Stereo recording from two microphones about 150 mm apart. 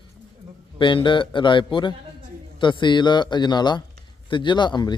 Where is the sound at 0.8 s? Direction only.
35° left (ahead or behind).